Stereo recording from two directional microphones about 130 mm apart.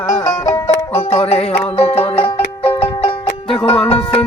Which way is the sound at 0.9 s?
55° left (ahead or behind).